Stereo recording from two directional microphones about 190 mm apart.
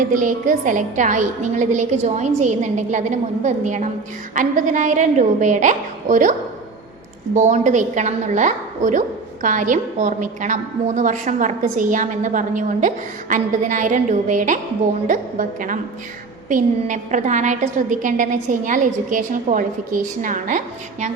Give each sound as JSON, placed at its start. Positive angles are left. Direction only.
{"t": 0.1, "sound": "a woman's voice", "side_deg": -45}
{"t": 7.3, "sound": "a woman's voice", "side_deg": -40}